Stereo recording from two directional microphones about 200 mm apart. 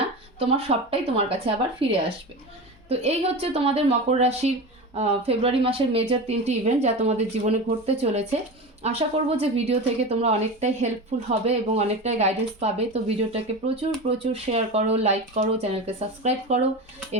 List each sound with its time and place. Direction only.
0.3 s speech: 30° right (ahead or behind)